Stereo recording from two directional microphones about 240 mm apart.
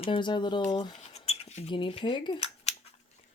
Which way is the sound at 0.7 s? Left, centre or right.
Centre.